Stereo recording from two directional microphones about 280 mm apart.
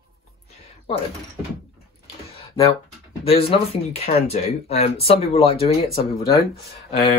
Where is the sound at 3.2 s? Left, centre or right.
Centre.